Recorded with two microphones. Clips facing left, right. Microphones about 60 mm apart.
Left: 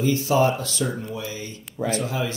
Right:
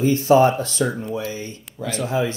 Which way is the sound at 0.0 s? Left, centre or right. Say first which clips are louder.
Right 5 dB; right.